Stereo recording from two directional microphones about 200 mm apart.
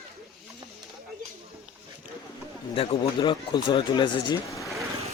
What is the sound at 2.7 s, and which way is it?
Speech, 30° left (ahead or behind).